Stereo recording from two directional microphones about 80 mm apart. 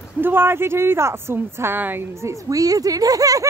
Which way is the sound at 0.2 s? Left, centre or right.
Right.